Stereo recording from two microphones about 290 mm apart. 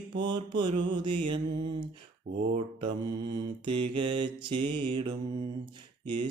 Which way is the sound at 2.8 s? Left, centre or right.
Centre.